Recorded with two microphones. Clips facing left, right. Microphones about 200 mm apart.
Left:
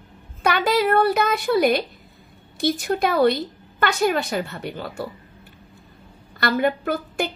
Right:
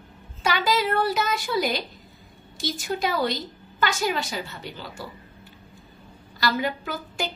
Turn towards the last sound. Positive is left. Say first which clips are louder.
# left 6 dB
turn(degrees=60)  # may be behind; listen again after turning